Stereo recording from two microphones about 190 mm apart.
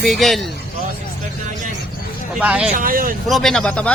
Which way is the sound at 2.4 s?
5° right (ahead or behind).